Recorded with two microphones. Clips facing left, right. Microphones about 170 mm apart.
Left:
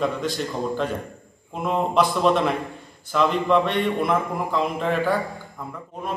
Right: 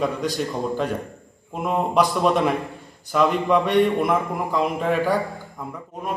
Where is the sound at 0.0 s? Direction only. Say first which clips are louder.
Right 1 dB; 10° right (ahead or behind).